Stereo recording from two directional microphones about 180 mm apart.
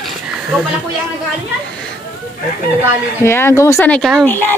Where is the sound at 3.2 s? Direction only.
15° left (ahead or behind).